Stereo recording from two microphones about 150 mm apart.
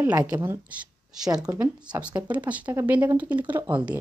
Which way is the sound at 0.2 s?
15° right (ahead or behind).